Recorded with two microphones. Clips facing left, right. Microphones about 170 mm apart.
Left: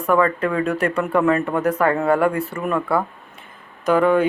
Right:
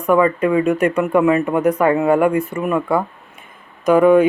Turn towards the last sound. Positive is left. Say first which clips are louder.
# right 5 dB
turn(degrees=-15)  # may be behind; listen again after turning